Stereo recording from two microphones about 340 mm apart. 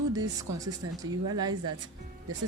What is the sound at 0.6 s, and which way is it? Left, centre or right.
Speech, centre.